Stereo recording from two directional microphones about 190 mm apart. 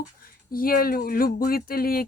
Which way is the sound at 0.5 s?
50° left (ahead or behind).